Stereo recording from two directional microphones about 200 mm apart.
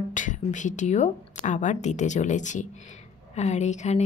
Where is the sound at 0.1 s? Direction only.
40° left (ahead or behind).